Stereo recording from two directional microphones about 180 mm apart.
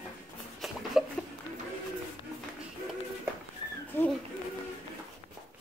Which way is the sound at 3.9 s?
10° left (ahead or behind).